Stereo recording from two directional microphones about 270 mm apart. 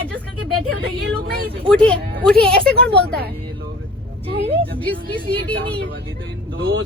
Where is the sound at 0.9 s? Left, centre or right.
Right.